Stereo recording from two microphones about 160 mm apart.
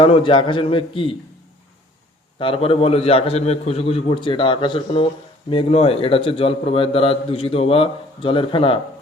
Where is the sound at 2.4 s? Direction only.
35° left (ahead or behind).